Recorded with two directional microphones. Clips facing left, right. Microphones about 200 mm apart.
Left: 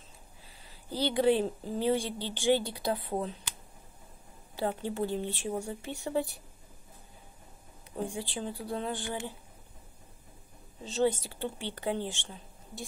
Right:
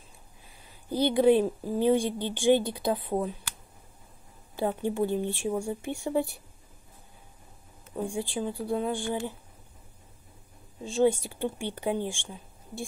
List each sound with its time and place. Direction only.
0.7 s speech: 15° right (ahead or behind)
4.6 s speech: 15° right (ahead or behind)
8.0 s speech: 15° right (ahead or behind)
10.8 s a woman's voice: 10° right (ahead or behind)